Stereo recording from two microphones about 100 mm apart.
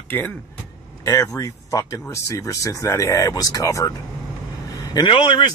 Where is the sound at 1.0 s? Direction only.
35° left (ahead or behind).